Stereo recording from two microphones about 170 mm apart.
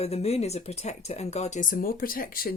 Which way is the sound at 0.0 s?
40° left (ahead or behind).